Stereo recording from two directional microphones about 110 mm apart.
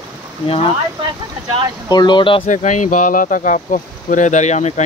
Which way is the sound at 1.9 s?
40° left (ahead or behind).